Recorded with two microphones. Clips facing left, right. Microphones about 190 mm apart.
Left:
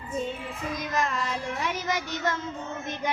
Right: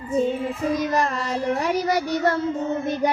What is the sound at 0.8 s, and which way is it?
Child singing, 40° right (ahead or behind).